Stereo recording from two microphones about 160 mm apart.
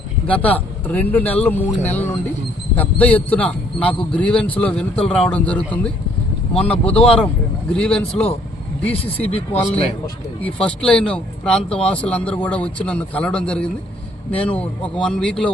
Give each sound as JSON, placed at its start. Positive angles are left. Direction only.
{"t": 0.3, "sound": "a man's voice", "side_deg": 10}
{"t": 6.7, "sound": "a man's voice", "side_deg": 5}
{"t": 9.2, "sound": "speech", "side_deg": 40}
{"t": 10.6, "sound": "a man's voice", "side_deg": 5}